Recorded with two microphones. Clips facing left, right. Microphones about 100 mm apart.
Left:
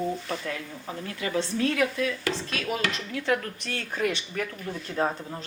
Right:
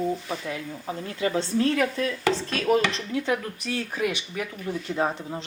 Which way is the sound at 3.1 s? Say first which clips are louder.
Even; 15° right (ahead or behind).